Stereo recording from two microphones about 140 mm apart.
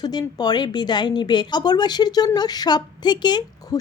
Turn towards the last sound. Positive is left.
turn(degrees=30)  # may be behind; listen again after turning